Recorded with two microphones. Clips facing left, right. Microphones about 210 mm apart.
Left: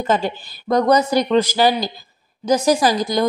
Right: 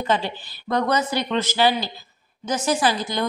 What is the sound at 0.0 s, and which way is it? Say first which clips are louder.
A woman's voice: left 4 dB; 45° left (ahead or behind).